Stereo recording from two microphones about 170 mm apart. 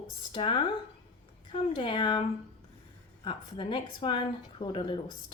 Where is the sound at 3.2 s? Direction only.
30° left (ahead or behind).